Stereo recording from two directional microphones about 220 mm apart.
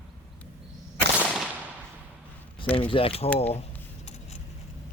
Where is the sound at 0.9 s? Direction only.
5° right (ahead or behind).